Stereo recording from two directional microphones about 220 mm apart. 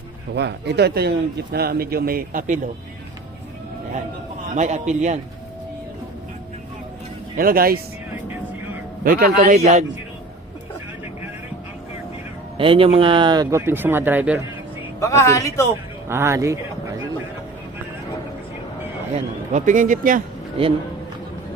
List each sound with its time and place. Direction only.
0.3 s speech: 50° right (ahead or behind)
4.5 s a man's voice: 30° right (ahead or behind)
7.3 s speech: 40° right (ahead or behind)
9.0 s a man's voice: 40° right (ahead or behind)
12.5 s speech: 25° right (ahead or behind); by 14.4 s 10° right (ahead or behind)
15.0 s speech: 15° left (ahead or behind)
16.0 s speech: 10° right (ahead or behind)
19.1 s a man's voice: 35° right (ahead or behind)